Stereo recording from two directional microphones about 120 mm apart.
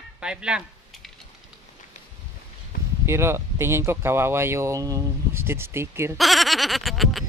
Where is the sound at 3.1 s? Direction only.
20° right (ahead or behind).